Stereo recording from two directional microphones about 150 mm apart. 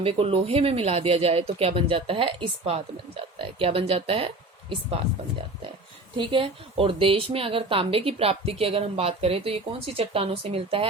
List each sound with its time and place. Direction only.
0.0 s a woman's voice: 40° right (ahead or behind)
6.1 s a woman's voice: 35° right (ahead or behind)